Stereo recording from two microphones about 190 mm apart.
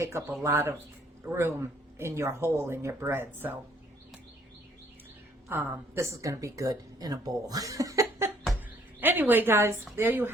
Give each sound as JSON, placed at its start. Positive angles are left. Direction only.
{"t": 0.0, "sound": "speech", "side_deg": -15}
{"t": 5.5, "sound": "a woman's voice", "side_deg": -10}